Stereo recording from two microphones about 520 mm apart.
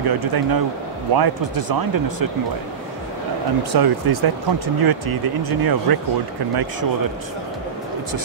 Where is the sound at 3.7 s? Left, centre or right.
Right.